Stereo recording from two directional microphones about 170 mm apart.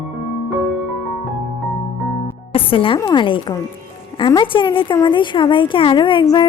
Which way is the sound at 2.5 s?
30° left (ahead or behind).